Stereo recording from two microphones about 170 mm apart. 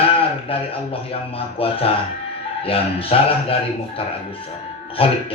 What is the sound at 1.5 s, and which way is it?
A man's voice, 35° left (ahead or behind).